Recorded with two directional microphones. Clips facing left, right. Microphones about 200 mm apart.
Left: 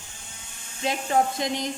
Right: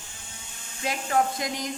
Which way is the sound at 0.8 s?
25° left (ahead or behind).